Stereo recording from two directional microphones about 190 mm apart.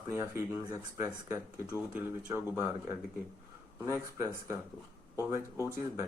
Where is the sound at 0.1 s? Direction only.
15° right (ahead or behind).